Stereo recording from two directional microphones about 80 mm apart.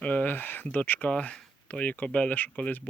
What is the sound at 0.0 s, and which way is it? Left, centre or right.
Speech, centre.